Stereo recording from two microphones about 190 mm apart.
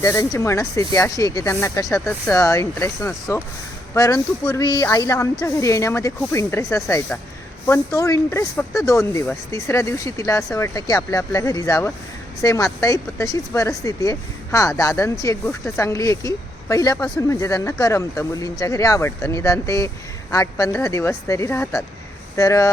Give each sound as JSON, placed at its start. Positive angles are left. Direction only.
{"t": 0.0, "sound": "speech", "side_deg": 15}